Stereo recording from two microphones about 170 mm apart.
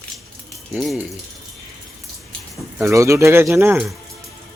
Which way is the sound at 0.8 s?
Centre (ahead or behind).